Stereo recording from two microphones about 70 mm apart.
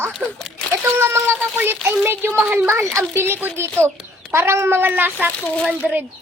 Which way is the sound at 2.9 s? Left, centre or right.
Right.